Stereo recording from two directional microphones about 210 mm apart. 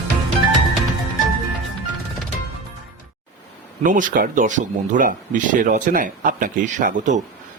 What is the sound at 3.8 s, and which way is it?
Speech, 40° right (ahead or behind).